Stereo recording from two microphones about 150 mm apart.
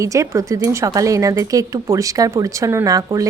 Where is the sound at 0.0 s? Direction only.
20° right (ahead or behind).